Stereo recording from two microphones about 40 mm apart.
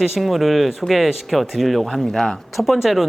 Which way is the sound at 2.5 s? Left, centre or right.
Centre.